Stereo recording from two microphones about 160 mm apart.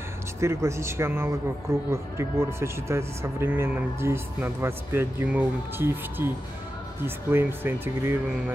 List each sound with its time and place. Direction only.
0.4 s speech: 15° right (ahead or behind)